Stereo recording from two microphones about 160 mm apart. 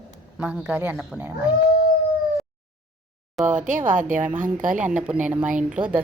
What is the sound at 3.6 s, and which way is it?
Speech, 55° right (ahead or behind).